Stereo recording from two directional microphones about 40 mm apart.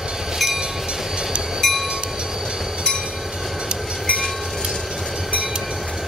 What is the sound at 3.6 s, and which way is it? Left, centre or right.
Train, centre.